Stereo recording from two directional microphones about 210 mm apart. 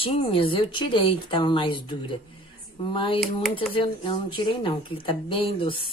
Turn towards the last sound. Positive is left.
turn(degrees=25)  # may be behind; listen again after turning